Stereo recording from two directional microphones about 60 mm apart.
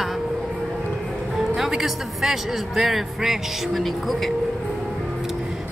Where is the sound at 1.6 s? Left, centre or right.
Centre.